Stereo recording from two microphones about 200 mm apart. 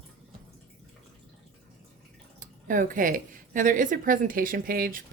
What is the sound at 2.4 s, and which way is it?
Speech, 40° right (ahead or behind).